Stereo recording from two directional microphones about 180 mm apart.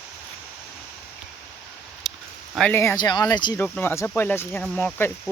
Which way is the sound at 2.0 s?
Centre (ahead or behind).